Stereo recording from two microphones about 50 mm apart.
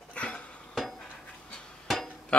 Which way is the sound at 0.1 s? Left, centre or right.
Left.